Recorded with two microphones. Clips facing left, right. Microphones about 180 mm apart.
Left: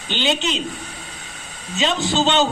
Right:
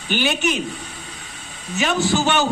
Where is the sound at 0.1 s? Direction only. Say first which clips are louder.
Right 1 dB; 20° left (ahead or behind).